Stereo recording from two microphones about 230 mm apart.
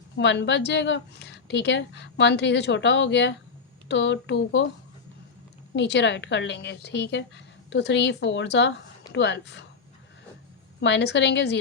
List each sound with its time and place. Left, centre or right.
0.2 s a woman's voice: left
5.7 s a woman's voice: left
10.8 s a woman's voice: left